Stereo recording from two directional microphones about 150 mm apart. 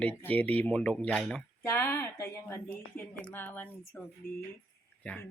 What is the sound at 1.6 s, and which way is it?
Speech, 15° left (ahead or behind).